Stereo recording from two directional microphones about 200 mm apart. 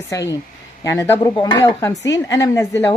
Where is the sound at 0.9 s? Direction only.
15° left (ahead or behind).